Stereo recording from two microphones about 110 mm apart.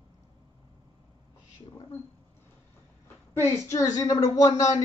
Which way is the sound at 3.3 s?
25° left (ahead or behind).